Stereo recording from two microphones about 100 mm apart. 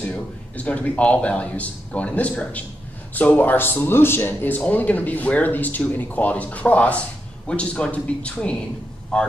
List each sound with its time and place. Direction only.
0.1 s speech: 10° left (ahead or behind)